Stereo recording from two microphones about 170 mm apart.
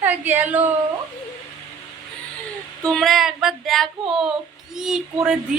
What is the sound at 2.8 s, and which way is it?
Child singing, centre (ahead or behind).